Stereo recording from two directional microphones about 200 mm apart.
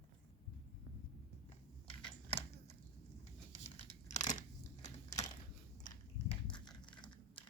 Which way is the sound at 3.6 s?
35° left (ahead or behind).